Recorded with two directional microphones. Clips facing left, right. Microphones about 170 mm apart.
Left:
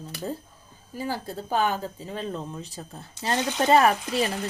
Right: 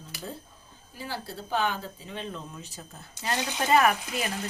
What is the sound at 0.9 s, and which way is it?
Speech, 45° left (ahead or behind).